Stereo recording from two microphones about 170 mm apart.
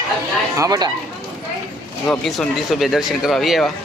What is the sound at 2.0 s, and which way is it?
Speech, centre (ahead or behind).